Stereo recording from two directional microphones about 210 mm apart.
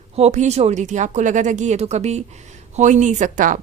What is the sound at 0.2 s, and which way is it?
Speech, 30° right (ahead or behind).